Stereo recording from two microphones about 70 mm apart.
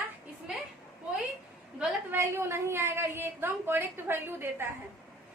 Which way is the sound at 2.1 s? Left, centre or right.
Right.